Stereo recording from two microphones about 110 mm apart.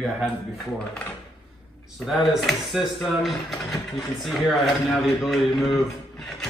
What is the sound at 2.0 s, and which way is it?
Speech, centre (ahead or behind).